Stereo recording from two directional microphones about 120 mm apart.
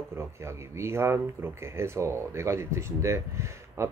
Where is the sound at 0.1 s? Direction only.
20° right (ahead or behind).